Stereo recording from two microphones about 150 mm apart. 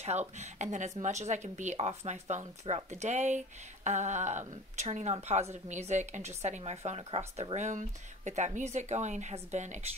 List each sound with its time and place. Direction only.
0.4 s a woman's voice: 50° right (ahead or behind)